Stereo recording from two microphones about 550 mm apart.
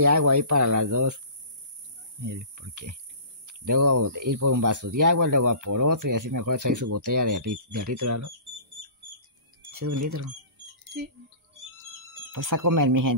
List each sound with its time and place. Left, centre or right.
0.0 s speech: right
2.2 s speech: right
9.7 s speech: right
12.3 s speech: right